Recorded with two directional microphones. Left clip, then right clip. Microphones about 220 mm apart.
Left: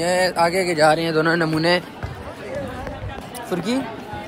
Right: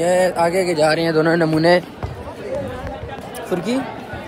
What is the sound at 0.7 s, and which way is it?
Speech, 45° left (ahead or behind).